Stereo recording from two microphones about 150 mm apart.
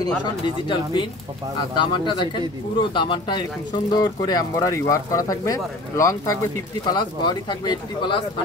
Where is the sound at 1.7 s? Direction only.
30° left (ahead or behind).